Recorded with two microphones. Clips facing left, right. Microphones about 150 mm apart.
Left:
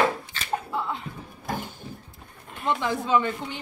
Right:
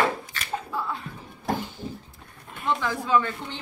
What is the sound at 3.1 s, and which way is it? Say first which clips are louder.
Speech: right 1 dB; 20° left (ahead or behind).